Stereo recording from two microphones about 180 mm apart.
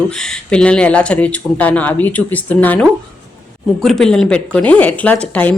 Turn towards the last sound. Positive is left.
turn(degrees=10)  # may be behind; listen again after turning